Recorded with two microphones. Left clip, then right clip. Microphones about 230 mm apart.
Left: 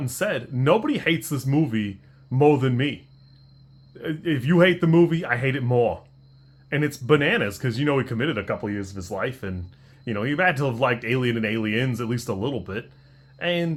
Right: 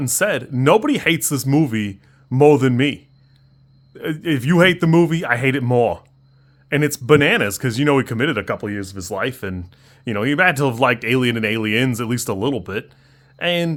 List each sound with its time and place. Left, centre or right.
0.0 s speech: right
3.9 s speech: right